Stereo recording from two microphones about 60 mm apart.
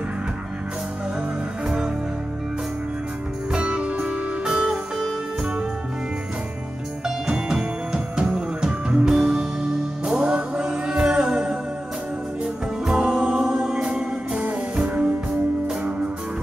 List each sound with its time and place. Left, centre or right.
3.5 s music: centre
7.2 s music: centre
12.8 s music: centre